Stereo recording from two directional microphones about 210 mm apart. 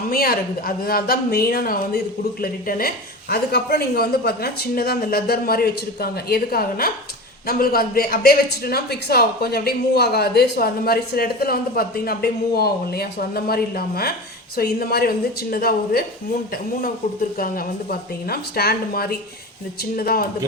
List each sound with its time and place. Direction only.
0.1 s speech: 45° left (ahead or behind)
17.3 s speech: 45° left (ahead or behind)